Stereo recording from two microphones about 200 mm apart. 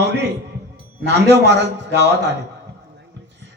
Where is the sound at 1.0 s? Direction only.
60° right (ahead or behind).